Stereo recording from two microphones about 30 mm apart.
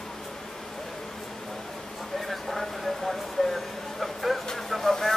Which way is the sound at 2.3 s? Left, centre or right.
Centre.